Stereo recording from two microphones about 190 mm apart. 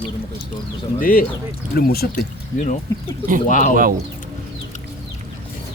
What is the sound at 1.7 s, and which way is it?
Speech, 55° left (ahead or behind).